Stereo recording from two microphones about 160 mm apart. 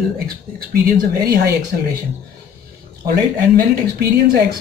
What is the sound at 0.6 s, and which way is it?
Speech, 70° right (ahead or behind).